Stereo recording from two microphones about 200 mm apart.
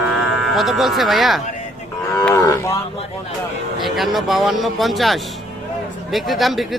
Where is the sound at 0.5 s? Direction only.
Centre (ahead or behind).